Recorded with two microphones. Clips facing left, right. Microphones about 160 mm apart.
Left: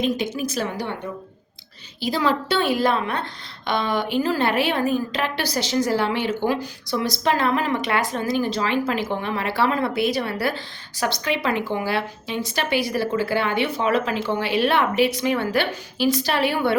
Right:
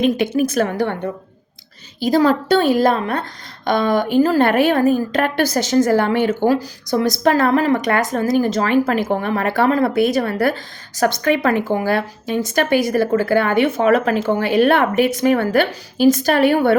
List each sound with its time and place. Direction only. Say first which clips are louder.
0.0 s a woman's voice: right 7 dB; 60° right (ahead or behind)